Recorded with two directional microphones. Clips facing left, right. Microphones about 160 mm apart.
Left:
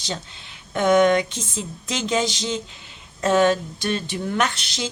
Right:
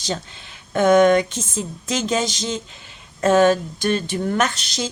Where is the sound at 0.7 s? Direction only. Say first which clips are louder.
Right 3 dB; 45° right (ahead or behind).